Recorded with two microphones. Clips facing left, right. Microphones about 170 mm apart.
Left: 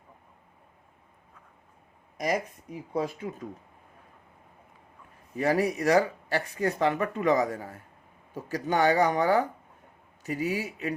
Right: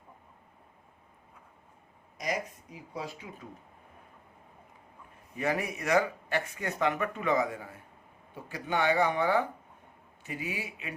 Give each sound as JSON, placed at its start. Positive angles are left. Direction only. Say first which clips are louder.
{"t": 2.1, "sound": "a sound", "louder": "left 5 dB", "side_deg": 50}
{"t": 2.9, "sound": "speech", "louder": "left 9 dB", "side_deg": 50}
{"t": 5.4, "sound": "speech", "louder": "left 6 dB", "side_deg": 35}